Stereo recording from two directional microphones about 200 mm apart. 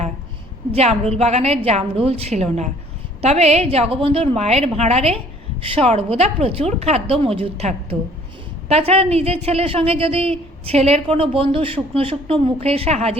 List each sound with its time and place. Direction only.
0.7 s a woman's voice: 30° right (ahead or behind)